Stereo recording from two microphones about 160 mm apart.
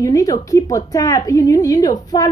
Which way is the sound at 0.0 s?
20° left (ahead or behind).